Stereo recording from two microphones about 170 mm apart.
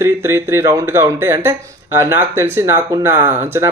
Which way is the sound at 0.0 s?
15° right (ahead or behind).